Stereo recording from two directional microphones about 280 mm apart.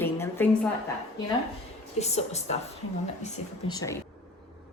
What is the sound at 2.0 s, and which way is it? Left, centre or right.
Speech, left.